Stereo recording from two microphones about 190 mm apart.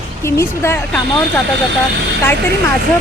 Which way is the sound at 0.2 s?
15° left (ahead or behind).